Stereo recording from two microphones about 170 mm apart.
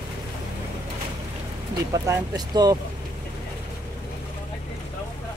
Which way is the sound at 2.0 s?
20° right (ahead or behind).